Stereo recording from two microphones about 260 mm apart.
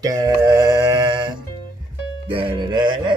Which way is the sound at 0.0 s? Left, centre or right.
Centre.